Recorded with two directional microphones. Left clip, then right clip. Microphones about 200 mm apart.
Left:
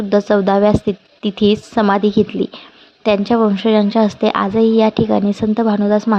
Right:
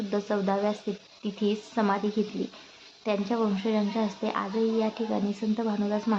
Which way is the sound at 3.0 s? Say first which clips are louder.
Left 14 dB; 40° left (ahead or behind).